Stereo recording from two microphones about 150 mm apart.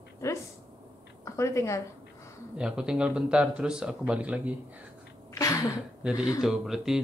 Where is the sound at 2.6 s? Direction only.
5° right (ahead or behind).